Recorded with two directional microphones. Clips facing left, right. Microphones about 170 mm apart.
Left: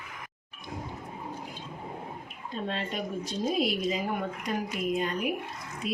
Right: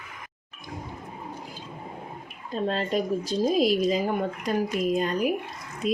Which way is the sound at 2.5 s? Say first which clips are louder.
Right 7 dB; 40° right (ahead or behind).